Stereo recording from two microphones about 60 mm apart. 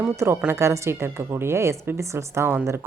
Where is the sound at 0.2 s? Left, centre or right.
Right.